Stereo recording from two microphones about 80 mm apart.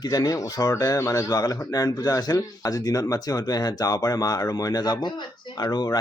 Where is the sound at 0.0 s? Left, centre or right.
Left.